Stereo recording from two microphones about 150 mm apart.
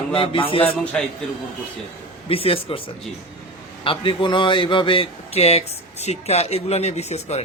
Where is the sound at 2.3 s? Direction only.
40° left (ahead or behind).